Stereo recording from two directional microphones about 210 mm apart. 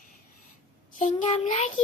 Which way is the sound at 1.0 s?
30° left (ahead or behind).